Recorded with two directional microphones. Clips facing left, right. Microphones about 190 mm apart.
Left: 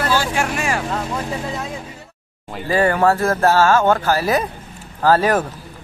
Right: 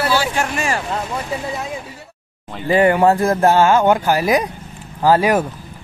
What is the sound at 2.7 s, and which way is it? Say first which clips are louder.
A man's voice: right 3 dB; 20° right (ahead or behind).